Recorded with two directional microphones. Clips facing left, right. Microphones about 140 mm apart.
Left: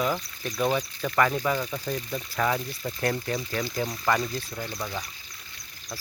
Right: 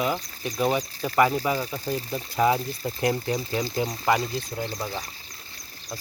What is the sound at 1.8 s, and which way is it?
Speech, 30° right (ahead or behind).